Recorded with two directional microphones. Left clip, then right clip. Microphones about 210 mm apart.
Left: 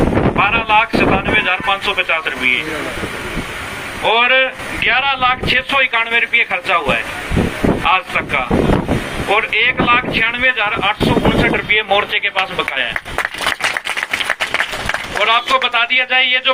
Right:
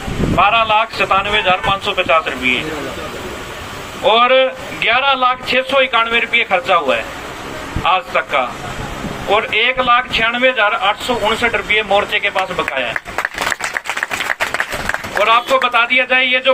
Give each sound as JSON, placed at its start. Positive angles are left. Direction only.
{"t": 0.3, "sound": "speech", "side_deg": -55}
{"t": 4.0, "sound": "speech", "side_deg": -55}
{"t": 15.2, "sound": "speech", "side_deg": -50}